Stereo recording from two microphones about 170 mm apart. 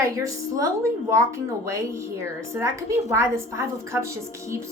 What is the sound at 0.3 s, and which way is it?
A woman's voice, 20° right (ahead or behind).